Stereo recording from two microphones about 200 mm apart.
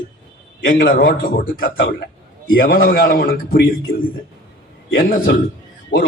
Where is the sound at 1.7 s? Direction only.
70° left (ahead or behind).